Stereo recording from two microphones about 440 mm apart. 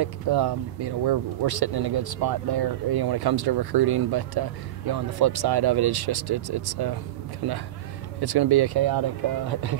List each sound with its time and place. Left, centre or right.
0.0 s speech: right